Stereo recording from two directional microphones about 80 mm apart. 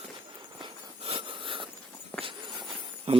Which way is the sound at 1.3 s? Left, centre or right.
Right.